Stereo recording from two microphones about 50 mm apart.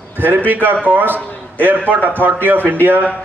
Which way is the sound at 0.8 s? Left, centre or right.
Right.